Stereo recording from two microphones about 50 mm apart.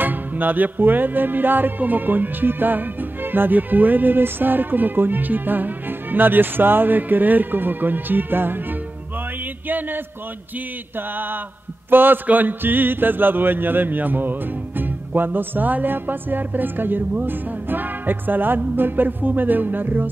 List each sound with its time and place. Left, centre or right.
0.0 s music: right
9.7 s music: right